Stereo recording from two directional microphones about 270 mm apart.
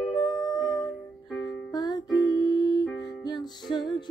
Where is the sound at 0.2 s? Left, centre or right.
Centre.